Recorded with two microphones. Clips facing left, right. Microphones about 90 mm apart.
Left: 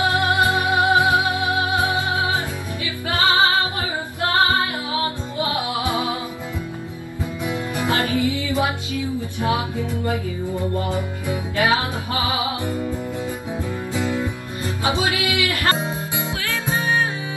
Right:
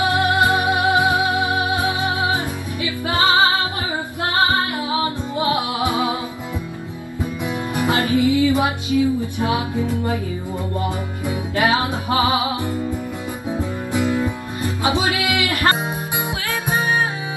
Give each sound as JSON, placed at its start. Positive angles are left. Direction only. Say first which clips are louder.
{"t": 0.0, "sound": "music", "louder": "right 1 dB", "side_deg": -20}
{"t": 7.4, "sound": "music", "louder": "right 2 dB", "side_deg": -20}
{"t": 10.8, "sound": "music", "louder": "even", "side_deg": -20}
{"t": 13.6, "sound": "music", "louder": "right 4 dB", "side_deg": -20}